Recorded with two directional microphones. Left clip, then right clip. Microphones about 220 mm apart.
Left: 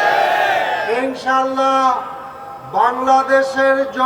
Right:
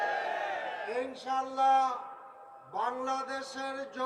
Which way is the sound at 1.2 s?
35° right (ahead or behind).